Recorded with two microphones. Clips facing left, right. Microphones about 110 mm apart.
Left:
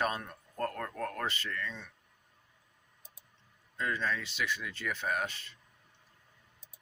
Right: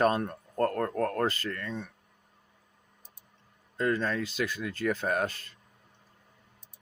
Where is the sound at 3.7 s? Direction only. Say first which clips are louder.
Right 6 dB; 45° right (ahead or behind).